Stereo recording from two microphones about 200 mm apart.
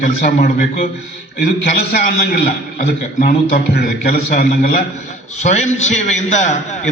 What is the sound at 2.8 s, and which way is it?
A man's voice, 40° left (ahead or behind).